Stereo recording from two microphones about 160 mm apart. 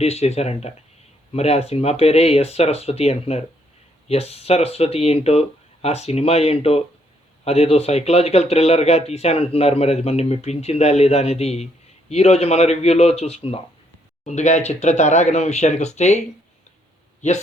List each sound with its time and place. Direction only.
0.0 s speech: 40° left (ahead or behind)